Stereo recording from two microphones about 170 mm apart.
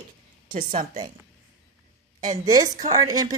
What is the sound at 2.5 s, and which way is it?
Speech, 20° right (ahead or behind).